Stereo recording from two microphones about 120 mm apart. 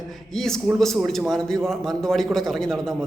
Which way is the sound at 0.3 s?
5° left (ahead or behind).